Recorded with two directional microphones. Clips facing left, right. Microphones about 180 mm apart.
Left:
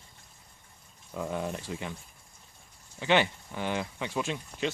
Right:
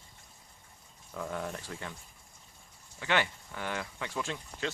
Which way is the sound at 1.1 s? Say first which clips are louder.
Left 4 dB; 20° left (ahead or behind).